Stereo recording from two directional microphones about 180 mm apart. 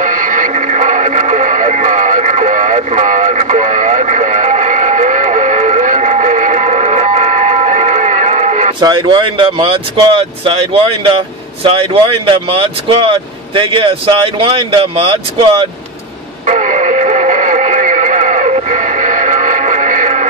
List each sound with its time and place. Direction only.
0.0 s radio: 45° right (ahead or behind)
8.7 s speech: 25° right (ahead or behind)
16.4 s radio: 40° right (ahead or behind)